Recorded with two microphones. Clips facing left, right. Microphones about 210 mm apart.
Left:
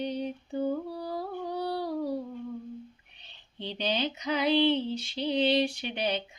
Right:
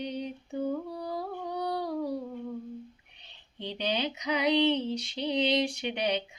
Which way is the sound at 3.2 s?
10° right (ahead or behind).